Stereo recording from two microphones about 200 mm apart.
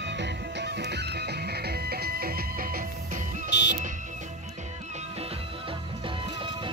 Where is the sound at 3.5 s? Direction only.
60° left (ahead or behind).